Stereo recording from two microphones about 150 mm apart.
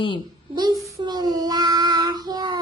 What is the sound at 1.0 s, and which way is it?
Child singing, 25° right (ahead or behind).